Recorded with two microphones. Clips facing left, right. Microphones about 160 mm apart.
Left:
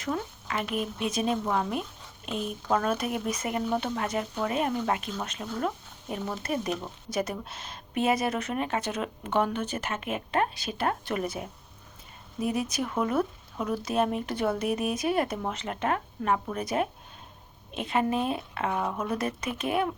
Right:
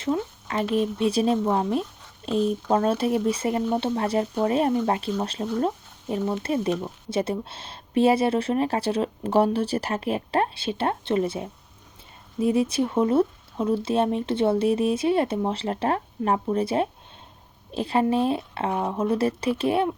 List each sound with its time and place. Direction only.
0.0 s speech: 30° right (ahead or behind)